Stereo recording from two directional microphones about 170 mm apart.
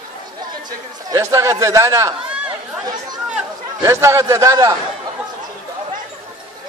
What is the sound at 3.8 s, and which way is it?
Speech, 15° right (ahead or behind).